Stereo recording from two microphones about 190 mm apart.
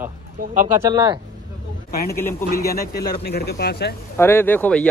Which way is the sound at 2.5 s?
55° left (ahead or behind).